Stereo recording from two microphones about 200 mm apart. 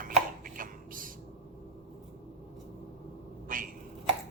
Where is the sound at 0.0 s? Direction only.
45° right (ahead or behind).